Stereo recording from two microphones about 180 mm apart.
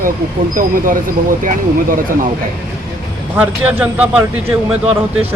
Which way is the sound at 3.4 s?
10° right (ahead or behind).